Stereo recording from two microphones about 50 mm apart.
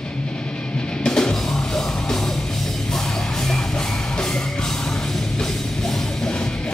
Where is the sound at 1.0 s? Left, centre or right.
Centre.